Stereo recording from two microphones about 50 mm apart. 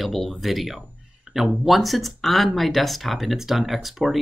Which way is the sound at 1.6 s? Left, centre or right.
Centre.